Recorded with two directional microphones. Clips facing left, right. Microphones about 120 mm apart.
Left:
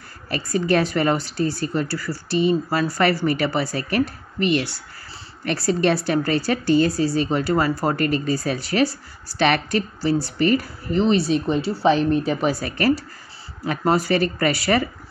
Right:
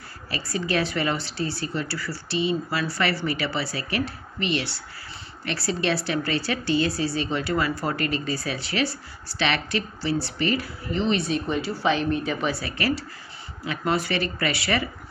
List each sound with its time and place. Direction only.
0.5 s a woman's voice: 45° left (ahead or behind)